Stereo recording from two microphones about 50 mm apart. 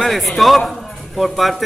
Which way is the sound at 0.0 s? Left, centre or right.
Centre.